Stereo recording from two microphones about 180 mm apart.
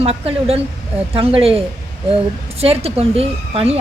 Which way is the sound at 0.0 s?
35° right (ahead or behind).